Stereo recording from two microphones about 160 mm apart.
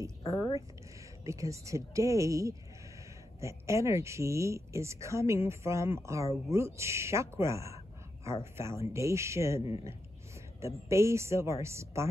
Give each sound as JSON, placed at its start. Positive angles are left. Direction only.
{"t": 1.2, "sound": "speech", "side_deg": -20}
{"t": 10.6, "sound": "speech", "side_deg": -15}